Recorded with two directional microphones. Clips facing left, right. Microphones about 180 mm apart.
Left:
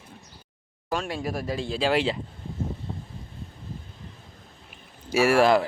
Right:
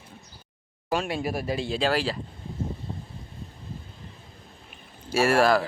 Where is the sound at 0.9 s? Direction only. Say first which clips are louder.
Right 2 dB; 5° right (ahead or behind).